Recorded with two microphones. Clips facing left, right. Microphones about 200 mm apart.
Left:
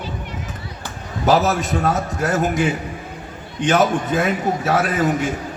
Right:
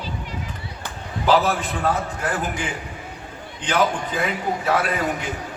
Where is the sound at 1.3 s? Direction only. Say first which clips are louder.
Left 2 dB; 45° left (ahead or behind).